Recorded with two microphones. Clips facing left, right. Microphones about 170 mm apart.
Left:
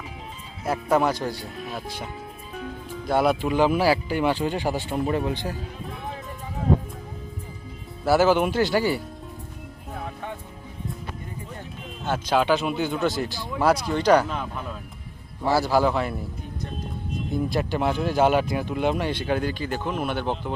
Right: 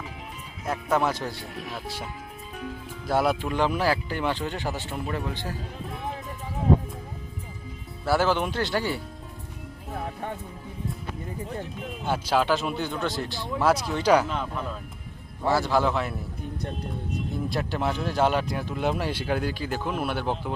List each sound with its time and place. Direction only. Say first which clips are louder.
0.6 s speech: left 3 dB; 5° left (ahead or behind)
3.1 s speech: left 3 dB; centre (ahead or behind); by 5.5 s 15° left (ahead or behind)
8.0 s speech: left 5 dB; 5° left (ahead or behind)
12.0 s speech: left 2 dB; 10° right (ahead or behind)
15.4 s speech: left 2 dB; 5° left (ahead or behind)
17.3 s speech: left 6 dB; centre (ahead or behind)